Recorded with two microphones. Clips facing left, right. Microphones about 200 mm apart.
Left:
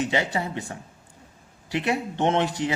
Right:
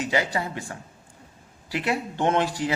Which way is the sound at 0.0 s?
25° left (ahead or behind).